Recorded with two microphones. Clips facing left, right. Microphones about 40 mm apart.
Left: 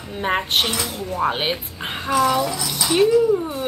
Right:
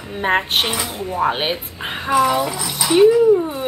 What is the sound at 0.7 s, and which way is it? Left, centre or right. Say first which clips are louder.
Speech: right 2 dB; right.